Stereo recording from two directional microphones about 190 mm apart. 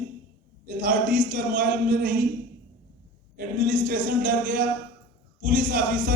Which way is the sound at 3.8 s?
50° right (ahead or behind).